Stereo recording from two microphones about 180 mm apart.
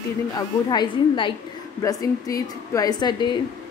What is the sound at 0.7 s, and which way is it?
A woman's voice, 25° left (ahead or behind).